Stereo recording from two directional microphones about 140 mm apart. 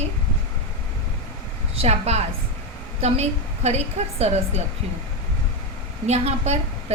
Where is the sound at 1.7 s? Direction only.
45° right (ahead or behind).